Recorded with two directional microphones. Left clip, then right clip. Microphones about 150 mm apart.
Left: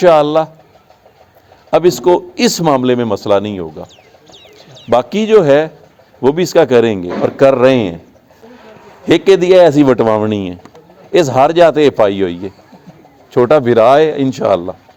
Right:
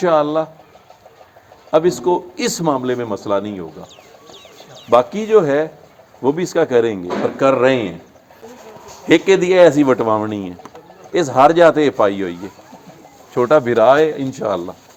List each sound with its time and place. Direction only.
0.0 s speech: 80° left
1.7 s a man's voice: 80° left
4.9 s a man's voice: 80° left
9.0 s a man's voice: 70° left (ahead or behind); by 12.5 s 90° left
13.3 s a man's voice: 80° left